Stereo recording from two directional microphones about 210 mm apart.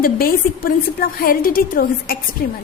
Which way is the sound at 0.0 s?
45° left (ahead or behind).